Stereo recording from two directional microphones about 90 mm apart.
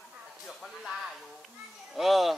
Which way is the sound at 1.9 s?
Centre (ahead or behind).